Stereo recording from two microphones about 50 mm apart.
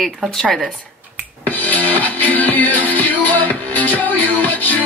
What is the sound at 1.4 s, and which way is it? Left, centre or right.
Music, left.